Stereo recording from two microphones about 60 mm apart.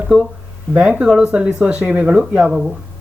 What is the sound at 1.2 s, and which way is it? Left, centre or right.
Speech, centre.